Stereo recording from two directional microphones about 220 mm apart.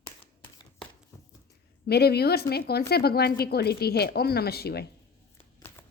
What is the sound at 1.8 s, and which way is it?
Speech, 45° left (ahead or behind).